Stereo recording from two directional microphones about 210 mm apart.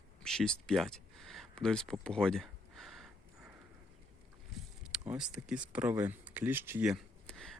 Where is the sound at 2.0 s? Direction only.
5° left (ahead or behind).